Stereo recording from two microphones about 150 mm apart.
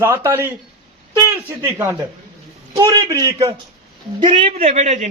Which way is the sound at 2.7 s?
25° right (ahead or behind).